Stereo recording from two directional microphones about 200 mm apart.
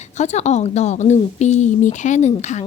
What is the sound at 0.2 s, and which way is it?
A woman's voice, 35° left (ahead or behind).